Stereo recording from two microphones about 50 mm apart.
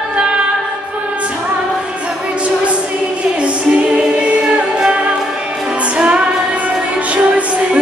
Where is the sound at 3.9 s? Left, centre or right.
Right.